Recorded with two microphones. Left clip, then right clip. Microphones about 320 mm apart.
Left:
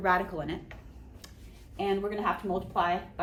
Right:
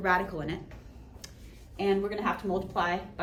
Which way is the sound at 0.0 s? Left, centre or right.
Centre.